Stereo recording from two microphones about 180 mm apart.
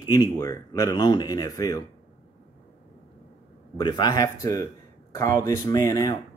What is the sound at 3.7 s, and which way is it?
Speech, 25° left (ahead or behind).